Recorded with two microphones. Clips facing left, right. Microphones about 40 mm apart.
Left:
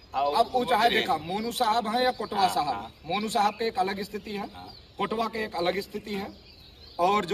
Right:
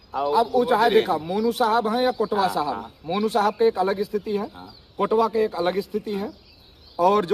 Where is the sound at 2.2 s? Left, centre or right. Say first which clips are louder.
Right 3 dB; right.